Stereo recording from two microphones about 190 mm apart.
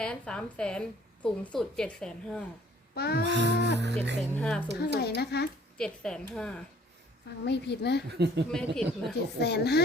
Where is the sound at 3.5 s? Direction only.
65° left (ahead or behind).